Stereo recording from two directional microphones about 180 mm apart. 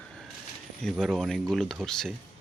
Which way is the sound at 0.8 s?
5° left (ahead or behind).